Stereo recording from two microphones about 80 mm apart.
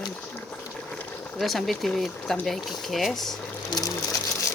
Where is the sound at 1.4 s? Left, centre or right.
Centre.